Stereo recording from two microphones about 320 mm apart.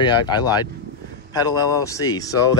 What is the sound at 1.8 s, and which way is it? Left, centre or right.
Speech, centre.